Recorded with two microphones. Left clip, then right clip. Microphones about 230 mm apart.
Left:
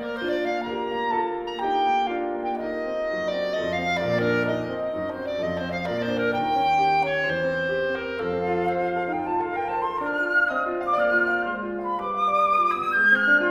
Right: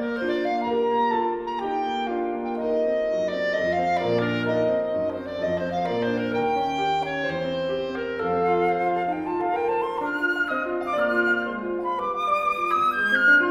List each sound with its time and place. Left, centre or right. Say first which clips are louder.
6.5 s music: left 3 dB; left
12.6 s music: left 2 dB; right